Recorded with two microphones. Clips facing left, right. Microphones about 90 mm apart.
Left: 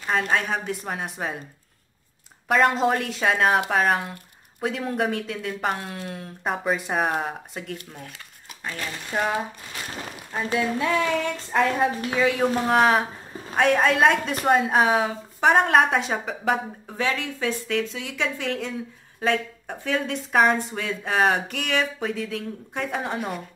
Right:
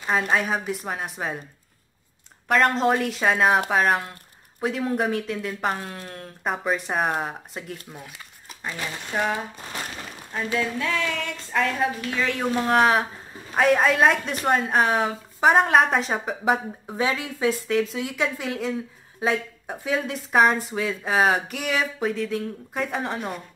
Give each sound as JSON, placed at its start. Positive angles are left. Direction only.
{"t": 0.0, "sound": "speech", "side_deg": -5}
{"t": 2.4, "sound": "speech", "side_deg": 5}
{"t": 8.6, "sound": "speech", "side_deg": -15}
{"t": 9.1, "sound": "speech", "side_deg": 5}
{"t": 10.3, "sound": "speech", "side_deg": 15}
{"t": 12.1, "sound": "speech", "side_deg": 10}
{"t": 16.8, "sound": "speech", "side_deg": -15}